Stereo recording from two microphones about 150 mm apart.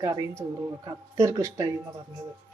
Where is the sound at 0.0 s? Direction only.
20° right (ahead or behind).